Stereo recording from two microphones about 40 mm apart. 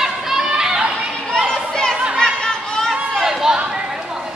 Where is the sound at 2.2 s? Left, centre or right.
Centre.